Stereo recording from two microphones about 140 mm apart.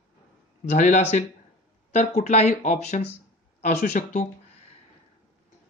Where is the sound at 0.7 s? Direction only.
65° left (ahead or behind).